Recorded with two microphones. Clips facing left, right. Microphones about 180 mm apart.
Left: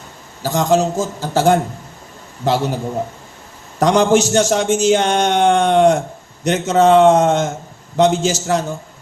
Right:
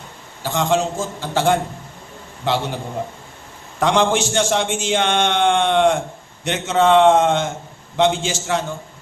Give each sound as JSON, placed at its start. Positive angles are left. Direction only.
{"t": 0.4, "sound": "a man's voice", "side_deg": 40}